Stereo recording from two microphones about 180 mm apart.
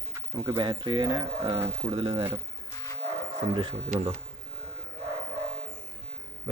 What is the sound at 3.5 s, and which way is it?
Speech, 25° right (ahead or behind).